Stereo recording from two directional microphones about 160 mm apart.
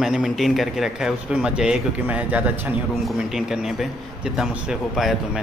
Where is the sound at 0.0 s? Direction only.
Centre (ahead or behind).